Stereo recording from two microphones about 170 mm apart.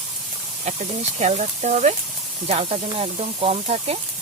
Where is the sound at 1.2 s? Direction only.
45° right (ahead or behind).